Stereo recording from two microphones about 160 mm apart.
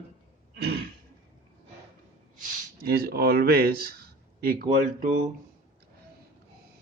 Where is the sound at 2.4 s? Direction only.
70° right (ahead or behind).